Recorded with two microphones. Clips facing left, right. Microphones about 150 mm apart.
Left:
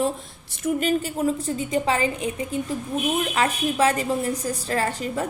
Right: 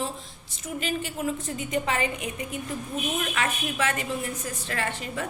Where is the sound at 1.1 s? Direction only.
35° left (ahead or behind).